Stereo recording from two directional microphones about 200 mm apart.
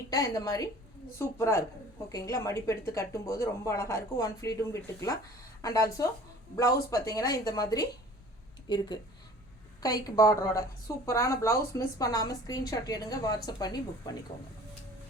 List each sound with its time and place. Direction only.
0.1 s a woman's voice: 15° left (ahead or behind)